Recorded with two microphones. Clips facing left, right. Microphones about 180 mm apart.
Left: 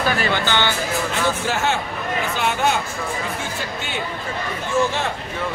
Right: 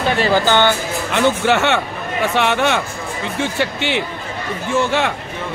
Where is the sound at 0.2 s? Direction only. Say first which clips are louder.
Right 7 dB; 40° right (ahead or behind).